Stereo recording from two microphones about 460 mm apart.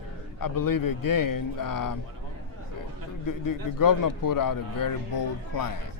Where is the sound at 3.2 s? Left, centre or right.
Left.